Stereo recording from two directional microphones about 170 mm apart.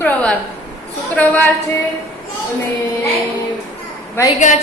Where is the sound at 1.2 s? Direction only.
10° left (ahead or behind).